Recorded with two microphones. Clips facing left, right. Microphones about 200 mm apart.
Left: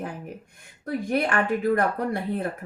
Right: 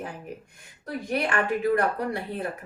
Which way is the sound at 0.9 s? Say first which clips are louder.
Left 3 dB; 50° left (ahead or behind).